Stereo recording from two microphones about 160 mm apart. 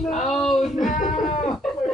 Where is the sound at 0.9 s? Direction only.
50° left (ahead or behind).